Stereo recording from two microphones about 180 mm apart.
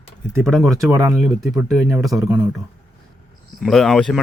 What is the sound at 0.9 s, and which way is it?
Speech, 20° right (ahead or behind).